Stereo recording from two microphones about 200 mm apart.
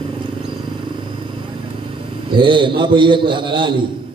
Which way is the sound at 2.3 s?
25° right (ahead or behind).